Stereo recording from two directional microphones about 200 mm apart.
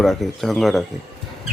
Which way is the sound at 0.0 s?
Centre (ahead or behind).